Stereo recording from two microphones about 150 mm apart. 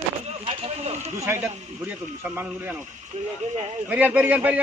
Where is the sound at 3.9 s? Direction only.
10° right (ahead or behind).